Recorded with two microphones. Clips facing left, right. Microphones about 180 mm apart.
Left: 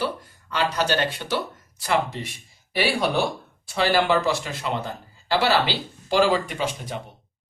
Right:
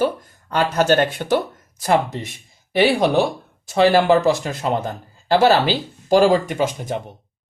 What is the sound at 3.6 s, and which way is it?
Speech, 45° right (ahead or behind).